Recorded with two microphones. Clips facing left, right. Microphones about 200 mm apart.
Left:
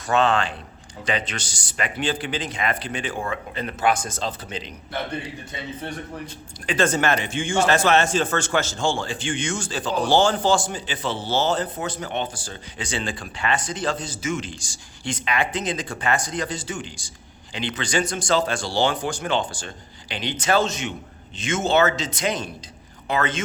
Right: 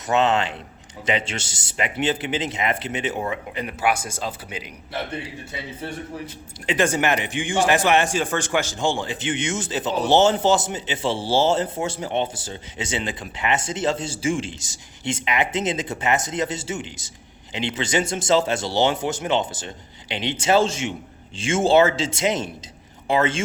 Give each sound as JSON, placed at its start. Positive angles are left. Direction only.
{"t": 0.1, "sound": "a man's voice", "side_deg": -20}
{"t": 6.7, "sound": "a man's voice", "side_deg": -15}